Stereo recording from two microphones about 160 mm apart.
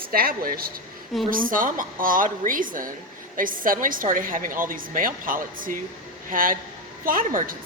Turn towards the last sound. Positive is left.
turn(degrees=-60)  # may be behind; listen again after turning